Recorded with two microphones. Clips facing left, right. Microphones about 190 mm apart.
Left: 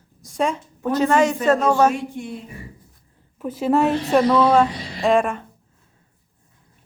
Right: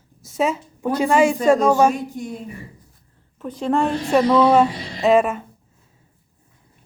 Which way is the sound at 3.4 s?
5° left (ahead or behind).